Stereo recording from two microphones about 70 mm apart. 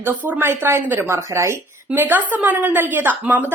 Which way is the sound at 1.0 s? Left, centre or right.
Right.